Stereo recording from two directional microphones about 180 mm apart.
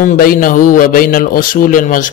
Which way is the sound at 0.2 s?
50° left (ahead or behind).